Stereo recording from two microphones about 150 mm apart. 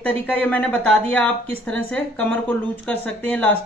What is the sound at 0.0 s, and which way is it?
Speech, 10° left (ahead or behind).